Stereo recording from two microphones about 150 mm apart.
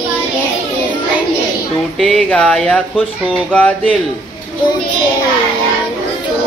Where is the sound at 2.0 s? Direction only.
5° left (ahead or behind).